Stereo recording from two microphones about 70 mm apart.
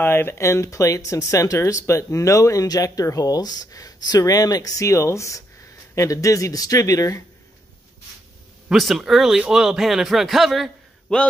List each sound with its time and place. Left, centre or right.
0.0 s speech: left
8.7 s a man's voice: centre
11.1 s a man's voice: centre